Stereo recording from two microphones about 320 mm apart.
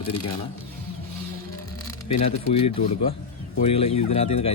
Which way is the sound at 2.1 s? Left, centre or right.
Centre.